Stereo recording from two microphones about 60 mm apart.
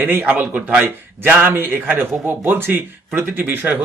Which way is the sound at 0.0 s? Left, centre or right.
Right.